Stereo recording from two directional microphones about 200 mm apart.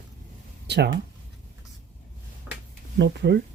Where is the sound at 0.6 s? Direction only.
55° right (ahead or behind).